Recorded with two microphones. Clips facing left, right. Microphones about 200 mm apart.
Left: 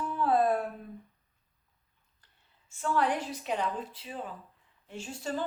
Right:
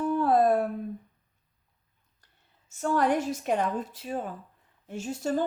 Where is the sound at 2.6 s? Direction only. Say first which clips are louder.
Right 4 dB; 45° right (ahead or behind).